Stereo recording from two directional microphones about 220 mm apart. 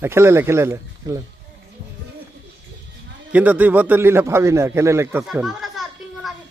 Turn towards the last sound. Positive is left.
turn(degrees=0)  # may be behind; listen again after turning